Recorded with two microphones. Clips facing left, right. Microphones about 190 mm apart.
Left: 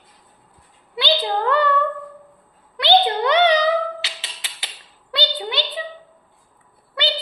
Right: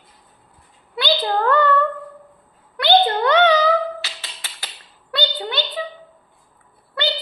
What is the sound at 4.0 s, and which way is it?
Music, 15° left (ahead or behind).